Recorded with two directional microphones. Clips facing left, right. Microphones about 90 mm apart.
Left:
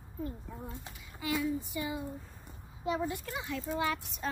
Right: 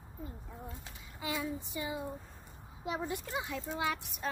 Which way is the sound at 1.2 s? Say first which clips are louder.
Left 4 dB; 25° right (ahead or behind).